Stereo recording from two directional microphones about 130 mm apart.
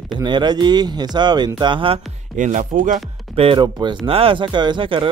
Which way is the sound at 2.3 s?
75° right (ahead or behind).